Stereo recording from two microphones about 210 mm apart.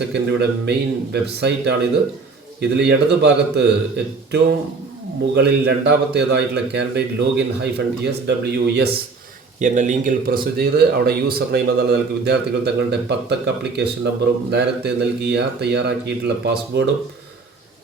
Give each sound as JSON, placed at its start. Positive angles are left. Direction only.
{"t": 0.1, "sound": "a man's voice", "side_deg": -55}
{"t": 9.6, "sound": "a man's voice", "side_deg": -35}